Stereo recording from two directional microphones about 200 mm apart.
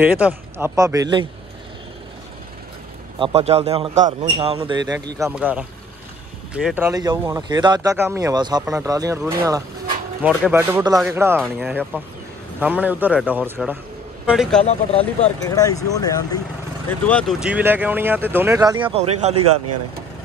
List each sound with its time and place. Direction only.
0.0 s speech: 5° right (ahead or behind)
3.2 s a man's voice: 30° right (ahead or behind)
5.2 s speech: 10° right (ahead or behind)
14.6 s speech: 30° left (ahead or behind)
15.4 s speech: 20° left (ahead or behind)
17.0 s speech: 5° left (ahead or behind); by 19.4 s 30° right (ahead or behind)